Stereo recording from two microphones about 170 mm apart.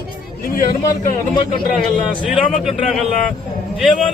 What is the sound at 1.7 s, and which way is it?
A man's voice, centre (ahead or behind).